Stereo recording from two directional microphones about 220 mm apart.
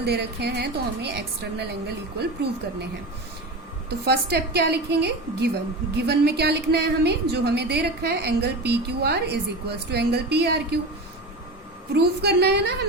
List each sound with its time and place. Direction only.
0.0 s a woman's voice: 50° right (ahead or behind)
3.8 s a woman's voice: 45° right (ahead or behind)
11.9 s a woman's voice: 50° right (ahead or behind)